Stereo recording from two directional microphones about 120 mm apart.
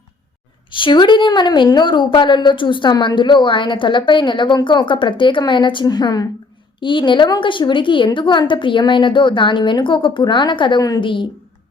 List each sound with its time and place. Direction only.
0.7 s a woman's voice: 40° left (ahead or behind)